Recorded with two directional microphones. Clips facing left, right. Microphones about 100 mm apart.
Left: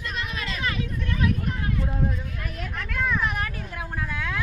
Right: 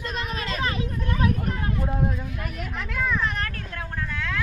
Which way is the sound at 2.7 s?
5° right (ahead or behind).